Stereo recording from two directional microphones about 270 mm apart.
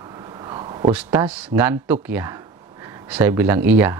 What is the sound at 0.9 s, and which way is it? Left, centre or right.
Speech, centre.